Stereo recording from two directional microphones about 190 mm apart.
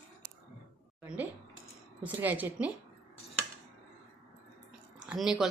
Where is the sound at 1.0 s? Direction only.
10° right (ahead or behind).